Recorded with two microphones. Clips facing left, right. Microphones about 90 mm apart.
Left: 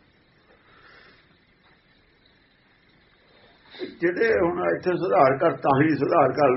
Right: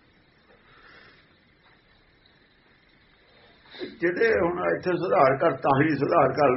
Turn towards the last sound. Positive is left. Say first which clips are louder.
# left 1 dB
turn(degrees=0)  # may be behind; listen again after turning